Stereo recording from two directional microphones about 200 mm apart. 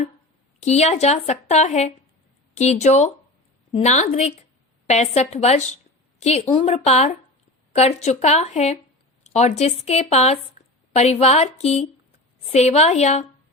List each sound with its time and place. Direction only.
0.6 s speech: 35° left (ahead or behind)
10.6 s a sound: 35° left (ahead or behind)
10.9 s speech: 35° left (ahead or behind)